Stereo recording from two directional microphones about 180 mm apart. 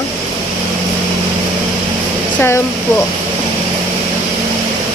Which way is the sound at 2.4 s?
15° left (ahead or behind).